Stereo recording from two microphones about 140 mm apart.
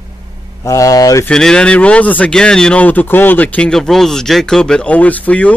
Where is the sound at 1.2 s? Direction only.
5° left (ahead or behind).